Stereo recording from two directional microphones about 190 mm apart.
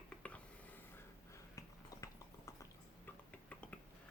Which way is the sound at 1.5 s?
20° left (ahead or behind).